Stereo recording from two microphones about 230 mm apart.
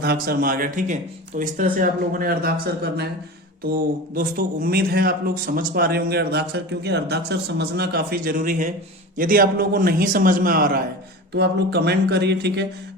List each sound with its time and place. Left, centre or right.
0.0 s speech: right